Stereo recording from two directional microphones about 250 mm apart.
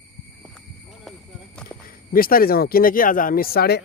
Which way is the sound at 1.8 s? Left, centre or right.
Left.